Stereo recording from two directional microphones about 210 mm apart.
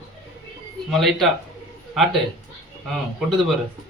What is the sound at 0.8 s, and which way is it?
Speech, centre (ahead or behind).